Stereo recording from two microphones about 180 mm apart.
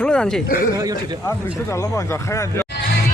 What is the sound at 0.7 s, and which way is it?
Speech, 20° right (ahead or behind).